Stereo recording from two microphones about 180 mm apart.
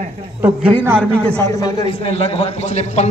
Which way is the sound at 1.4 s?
20° left (ahead or behind).